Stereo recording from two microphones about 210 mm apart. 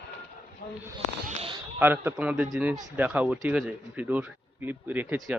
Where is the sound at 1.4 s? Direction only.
25° right (ahead or behind).